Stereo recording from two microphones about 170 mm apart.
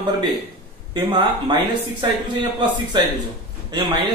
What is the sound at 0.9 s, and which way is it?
A man's voice, 30° right (ahead or behind).